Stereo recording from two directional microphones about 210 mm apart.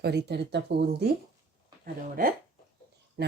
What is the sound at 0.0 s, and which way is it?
Speech, 50° right (ahead or behind).